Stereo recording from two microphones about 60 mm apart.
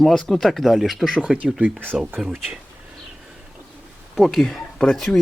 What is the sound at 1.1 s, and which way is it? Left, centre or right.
Speech, centre.